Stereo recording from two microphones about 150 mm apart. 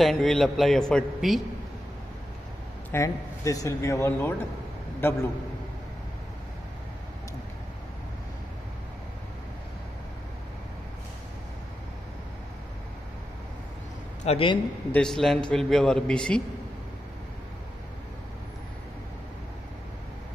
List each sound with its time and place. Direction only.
0.0 s a man's voice: centre (ahead or behind)
2.9 s a man's voice: 20° left (ahead or behind)
14.2 s a man's voice: 40° left (ahead or behind)
14.9 s a man's voice: 5° left (ahead or behind)